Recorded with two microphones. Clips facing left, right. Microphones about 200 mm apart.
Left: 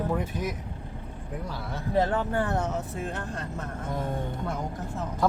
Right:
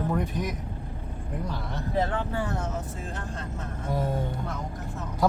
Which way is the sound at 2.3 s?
60° left (ahead or behind).